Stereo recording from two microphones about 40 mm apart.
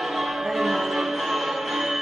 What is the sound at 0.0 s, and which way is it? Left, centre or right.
Music, centre.